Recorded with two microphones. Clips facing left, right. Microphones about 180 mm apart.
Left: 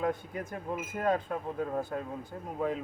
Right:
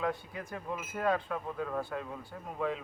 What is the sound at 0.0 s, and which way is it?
Speech, 45° left (ahead or behind).